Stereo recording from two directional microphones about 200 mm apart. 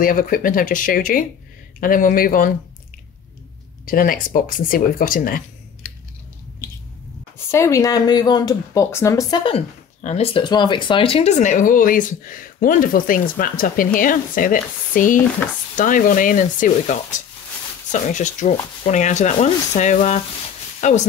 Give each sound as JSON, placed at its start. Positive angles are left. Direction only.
{"t": 0.0, "sound": "speech", "side_deg": 45}
{"t": 3.8, "sound": "speech", "side_deg": 45}
{"t": 7.3, "sound": "speech", "side_deg": 15}
{"t": 10.0, "sound": "speech", "side_deg": 30}
{"t": 18.0, "sound": "speech", "side_deg": 40}